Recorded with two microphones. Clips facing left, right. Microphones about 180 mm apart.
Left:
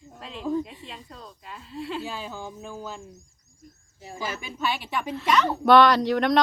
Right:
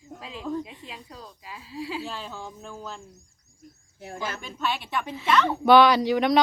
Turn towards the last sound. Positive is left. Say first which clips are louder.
# even
turn(degrees=0)  # may be behind; listen again after turning